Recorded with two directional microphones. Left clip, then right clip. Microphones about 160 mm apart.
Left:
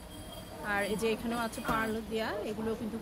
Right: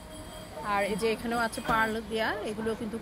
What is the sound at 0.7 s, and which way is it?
Speech, centre (ahead or behind).